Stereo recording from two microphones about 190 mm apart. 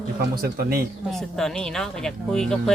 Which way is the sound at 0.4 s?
50° right (ahead or behind).